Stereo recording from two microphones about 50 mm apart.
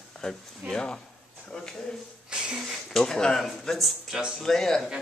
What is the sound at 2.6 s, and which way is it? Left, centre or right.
Speech, centre.